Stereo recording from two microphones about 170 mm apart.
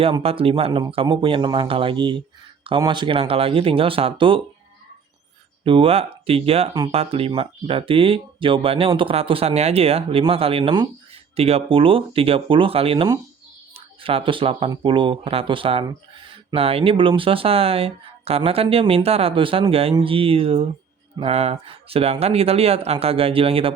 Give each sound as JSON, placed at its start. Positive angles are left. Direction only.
{"t": 0.0, "sound": "speech", "side_deg": -35}
{"t": 5.6, "sound": "speech", "side_deg": -30}